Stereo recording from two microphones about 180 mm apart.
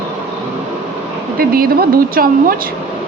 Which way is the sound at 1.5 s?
55° right (ahead or behind).